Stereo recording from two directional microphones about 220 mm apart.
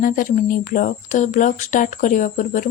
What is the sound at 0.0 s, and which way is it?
Speech, 40° left (ahead or behind).